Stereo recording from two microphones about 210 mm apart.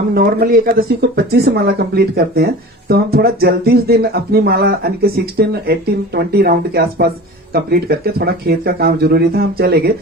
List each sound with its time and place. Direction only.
0.1 s speech: 45° right (ahead or behind)